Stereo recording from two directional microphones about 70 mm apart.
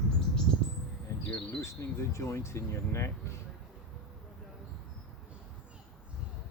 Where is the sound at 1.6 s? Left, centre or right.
Left.